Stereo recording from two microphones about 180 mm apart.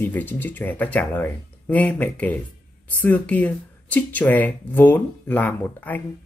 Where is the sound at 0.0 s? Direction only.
10° left (ahead or behind).